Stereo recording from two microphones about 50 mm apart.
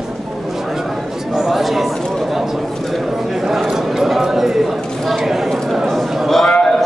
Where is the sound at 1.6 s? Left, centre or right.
Centre.